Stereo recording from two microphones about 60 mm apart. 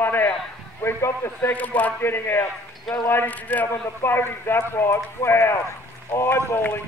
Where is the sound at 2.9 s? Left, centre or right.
Centre.